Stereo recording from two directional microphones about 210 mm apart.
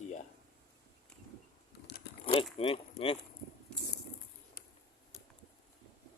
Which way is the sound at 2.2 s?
25° left (ahead or behind).